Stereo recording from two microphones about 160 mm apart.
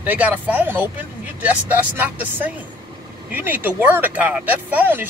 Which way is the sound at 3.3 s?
10° right (ahead or behind).